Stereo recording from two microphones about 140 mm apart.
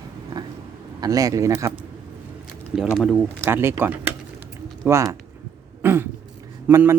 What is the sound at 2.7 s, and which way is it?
Speech, centre (ahead or behind).